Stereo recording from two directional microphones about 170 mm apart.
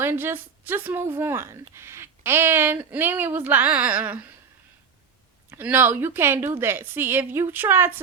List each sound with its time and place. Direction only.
0.0 s a woman's voice: 15° right (ahead or behind)
5.5 s a woman's voice: 10° right (ahead or behind)